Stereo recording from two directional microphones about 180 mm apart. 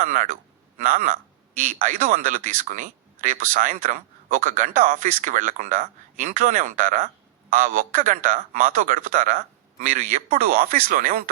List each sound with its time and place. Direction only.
0.0 s speech: 45° right (ahead or behind)